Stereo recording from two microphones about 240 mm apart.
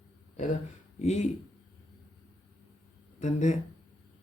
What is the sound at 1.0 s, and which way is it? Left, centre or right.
Speech, left.